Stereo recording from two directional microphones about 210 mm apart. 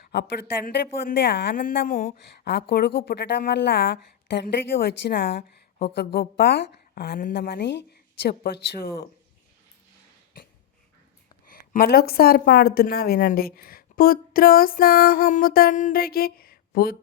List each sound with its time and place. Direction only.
0.1 s a woman's voice: 50° left (ahead or behind)
11.4 s a woman's voice: 45° left (ahead or behind)